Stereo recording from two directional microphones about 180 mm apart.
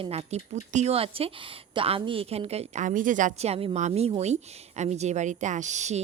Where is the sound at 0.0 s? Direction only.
35° right (ahead or behind).